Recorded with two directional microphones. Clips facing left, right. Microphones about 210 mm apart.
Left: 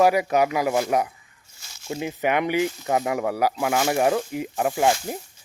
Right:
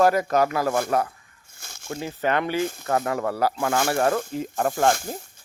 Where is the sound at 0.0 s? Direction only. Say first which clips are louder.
Left 1 dB; 10° left (ahead or behind).